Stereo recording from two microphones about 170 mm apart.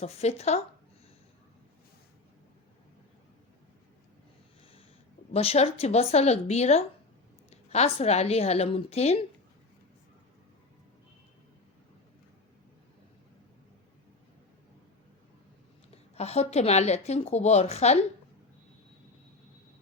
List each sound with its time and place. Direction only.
0.0 s speech: 40° left (ahead or behind)
5.3 s speech: 35° left (ahead or behind)
15.9 s speech: 40° left (ahead or behind)